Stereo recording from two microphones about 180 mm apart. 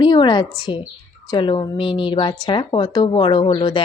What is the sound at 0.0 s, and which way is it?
A woman's voice, 25° left (ahead or behind).